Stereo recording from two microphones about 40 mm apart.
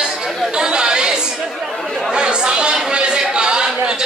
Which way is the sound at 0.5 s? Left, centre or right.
Right.